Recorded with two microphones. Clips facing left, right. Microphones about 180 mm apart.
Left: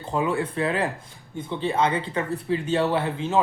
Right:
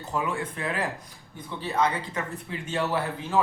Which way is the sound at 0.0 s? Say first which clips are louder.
Left 5 dB; 30° left (ahead or behind).